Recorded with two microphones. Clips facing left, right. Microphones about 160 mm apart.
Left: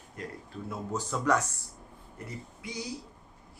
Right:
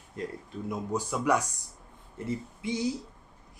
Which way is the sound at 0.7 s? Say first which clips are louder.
Right 3 dB; 10° right (ahead or behind).